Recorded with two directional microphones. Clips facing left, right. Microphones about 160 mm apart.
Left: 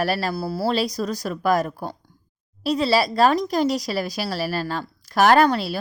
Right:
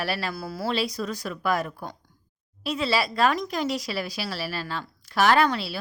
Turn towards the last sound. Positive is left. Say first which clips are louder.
# left 5 dB
turn(degrees=45)  # may be behind; listen again after turning